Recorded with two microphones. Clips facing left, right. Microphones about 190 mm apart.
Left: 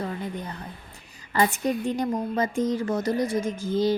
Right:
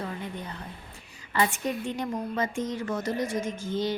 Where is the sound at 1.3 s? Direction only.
40° left (ahead or behind).